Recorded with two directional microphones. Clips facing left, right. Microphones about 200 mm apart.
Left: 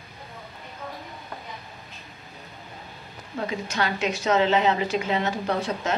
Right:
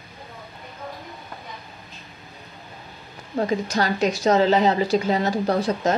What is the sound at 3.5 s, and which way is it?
A woman's voice, 40° right (ahead or behind).